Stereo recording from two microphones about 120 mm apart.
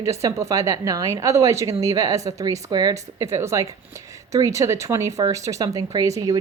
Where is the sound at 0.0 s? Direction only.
25° right (ahead or behind).